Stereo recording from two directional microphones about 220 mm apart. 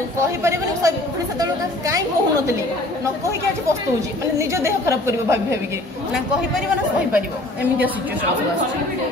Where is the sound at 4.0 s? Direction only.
15° right (ahead or behind).